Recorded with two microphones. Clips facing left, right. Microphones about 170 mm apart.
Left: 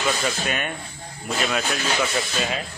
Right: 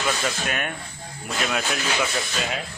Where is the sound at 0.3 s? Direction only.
Centre (ahead or behind).